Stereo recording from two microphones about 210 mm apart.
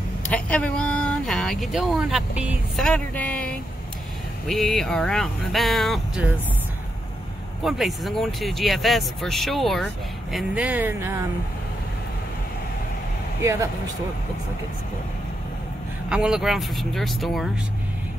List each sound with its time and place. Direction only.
0.3 s speech: 5° left (ahead or behind)
7.6 s speech: centre (ahead or behind)
13.4 s speech: 15° right (ahead or behind)
16.1 s speech: 5° right (ahead or behind)